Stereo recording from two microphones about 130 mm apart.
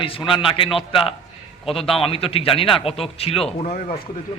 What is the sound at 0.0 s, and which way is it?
A man's voice, 40° left (ahead or behind).